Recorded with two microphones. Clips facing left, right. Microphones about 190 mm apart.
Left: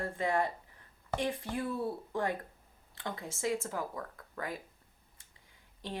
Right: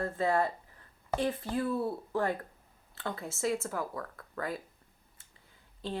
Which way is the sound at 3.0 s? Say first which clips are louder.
Right 2 dB; 15° left (ahead or behind).